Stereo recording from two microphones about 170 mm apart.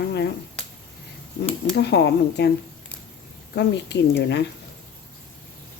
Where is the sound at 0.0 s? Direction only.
90° left.